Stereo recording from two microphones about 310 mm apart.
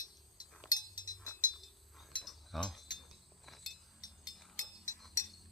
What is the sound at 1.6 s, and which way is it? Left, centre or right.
Chink, centre.